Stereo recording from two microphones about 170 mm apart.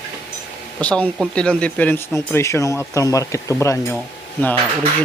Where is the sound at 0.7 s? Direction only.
5° left (ahead or behind).